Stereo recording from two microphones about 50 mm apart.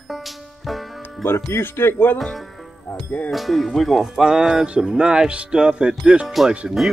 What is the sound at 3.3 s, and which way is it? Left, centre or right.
Speech, centre.